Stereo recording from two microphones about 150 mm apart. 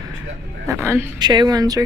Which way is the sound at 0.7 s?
15° right (ahead or behind).